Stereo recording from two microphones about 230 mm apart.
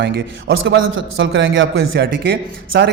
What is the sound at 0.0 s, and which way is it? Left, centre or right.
A man's voice, right.